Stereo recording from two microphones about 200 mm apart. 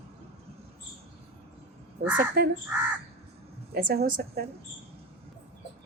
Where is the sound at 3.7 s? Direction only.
50° right (ahead or behind).